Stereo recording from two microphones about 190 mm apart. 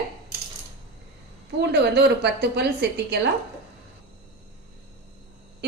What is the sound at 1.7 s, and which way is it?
Speech, 60° right (ahead or behind).